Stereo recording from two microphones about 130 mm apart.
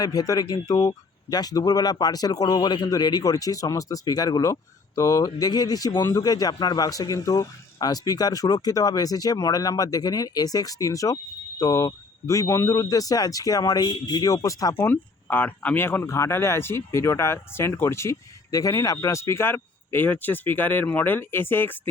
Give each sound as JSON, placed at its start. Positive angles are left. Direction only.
{"t": 0.0, "sound": "speech", "side_deg": 30}